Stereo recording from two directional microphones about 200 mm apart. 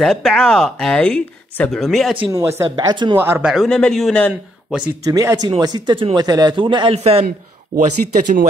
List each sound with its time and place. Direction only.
0.0 s speech: centre (ahead or behind)
2.1 s speech: 20° right (ahead or behind)
3.2 s speech: 10° right (ahead or behind)
4.7 s speech: 15° right (ahead or behind); by 7.2 s 30° right (ahead or behind)
7.2 s a man's voice: 40° right (ahead or behind)